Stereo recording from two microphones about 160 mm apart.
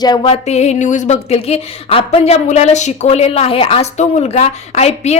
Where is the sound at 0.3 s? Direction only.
45° left (ahead or behind).